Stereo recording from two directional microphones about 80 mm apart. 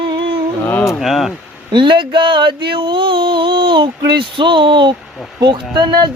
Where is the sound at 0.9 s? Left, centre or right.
Centre.